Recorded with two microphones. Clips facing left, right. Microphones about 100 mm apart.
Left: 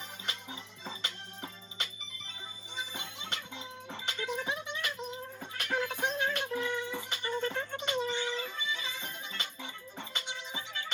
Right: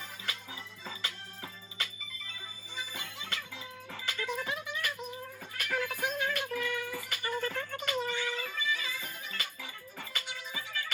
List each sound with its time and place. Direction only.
0.3 s music: 25° left (ahead or behind)